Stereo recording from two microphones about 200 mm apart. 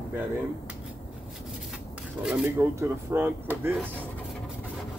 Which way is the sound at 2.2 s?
Centre (ahead or behind).